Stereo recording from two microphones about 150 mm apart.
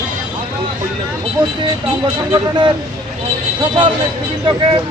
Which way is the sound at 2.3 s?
30° right (ahead or behind).